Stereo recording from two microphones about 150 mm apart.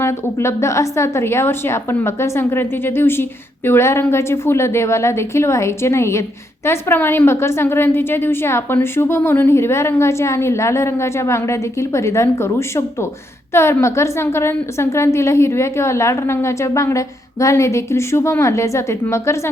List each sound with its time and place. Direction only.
0.0 s a woman's voice: 20° left (ahead or behind)